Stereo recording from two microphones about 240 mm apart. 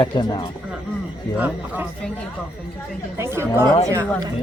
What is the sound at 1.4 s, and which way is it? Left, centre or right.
Speech, centre.